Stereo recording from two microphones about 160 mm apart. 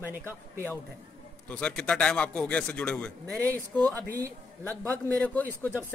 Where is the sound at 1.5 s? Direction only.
5° left (ahead or behind).